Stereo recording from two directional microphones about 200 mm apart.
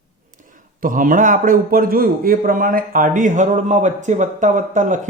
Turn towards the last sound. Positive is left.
turn(degrees=-40)  # may be behind; listen again after turning